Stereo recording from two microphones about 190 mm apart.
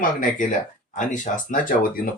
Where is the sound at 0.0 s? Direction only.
45° left (ahead or behind).